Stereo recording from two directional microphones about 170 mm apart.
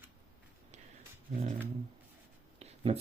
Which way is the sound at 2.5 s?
35° right (ahead or behind).